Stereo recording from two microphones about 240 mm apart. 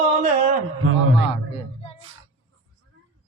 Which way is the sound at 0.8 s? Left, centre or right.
Right.